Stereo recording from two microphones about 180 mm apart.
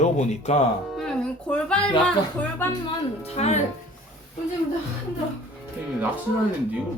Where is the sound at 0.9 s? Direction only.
5° left (ahead or behind).